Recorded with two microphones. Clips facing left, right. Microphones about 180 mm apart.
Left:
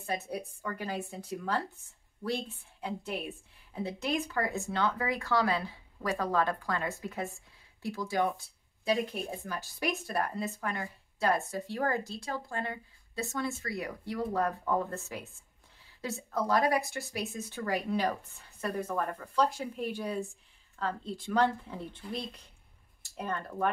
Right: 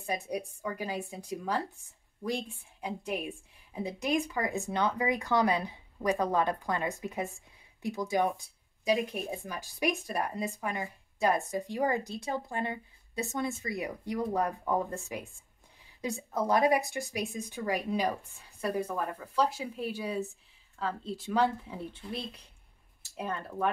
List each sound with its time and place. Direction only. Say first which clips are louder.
0.0 s speech: right 1 dB; 10° right (ahead or behind)
2.8 s speech: right 1 dB; 15° right (ahead or behind)
16.0 s a woman's voice: right 1 dB; 20° right (ahead or behind)